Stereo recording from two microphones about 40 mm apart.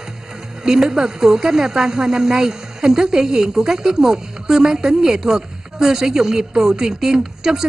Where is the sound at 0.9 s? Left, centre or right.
Centre.